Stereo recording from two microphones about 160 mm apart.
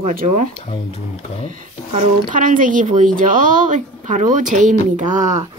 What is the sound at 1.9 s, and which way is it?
Speech, 55° right (ahead or behind).